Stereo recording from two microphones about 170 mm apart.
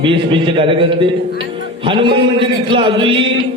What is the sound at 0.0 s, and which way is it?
A man's voice, 30° right (ahead or behind).